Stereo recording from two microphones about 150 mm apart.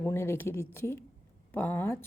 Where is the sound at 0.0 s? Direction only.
15° left (ahead or behind).